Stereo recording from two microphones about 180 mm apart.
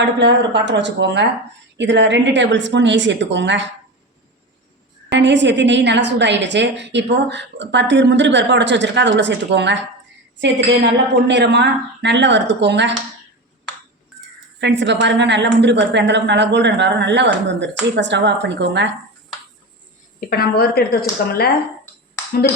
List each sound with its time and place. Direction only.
0.0 s a woman's voice: 75° right (ahead or behind)
5.1 s a woman's voice: 80° right
11.3 s a woman's voice: 75° right (ahead or behind)
14.1 s a sound: centre (ahead or behind)
14.6 s a woman's voice: 75° right (ahead or behind)
20.1 s speech: 55° left (ahead or behind)